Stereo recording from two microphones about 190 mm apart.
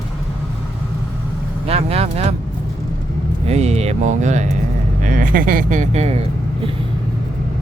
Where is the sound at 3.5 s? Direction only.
35° right (ahead or behind).